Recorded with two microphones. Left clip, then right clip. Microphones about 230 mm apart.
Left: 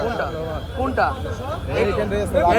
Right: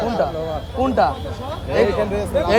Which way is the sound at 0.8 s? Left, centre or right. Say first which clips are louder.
Right 3 dB; right.